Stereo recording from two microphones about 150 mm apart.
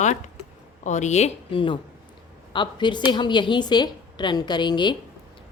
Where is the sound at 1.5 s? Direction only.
35° left (ahead or behind).